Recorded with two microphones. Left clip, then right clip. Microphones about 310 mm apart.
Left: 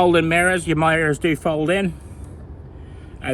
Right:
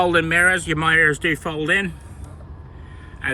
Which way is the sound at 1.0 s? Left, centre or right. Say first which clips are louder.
Right 3 dB; left.